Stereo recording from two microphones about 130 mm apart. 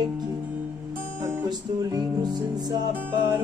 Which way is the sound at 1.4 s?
30° right (ahead or behind).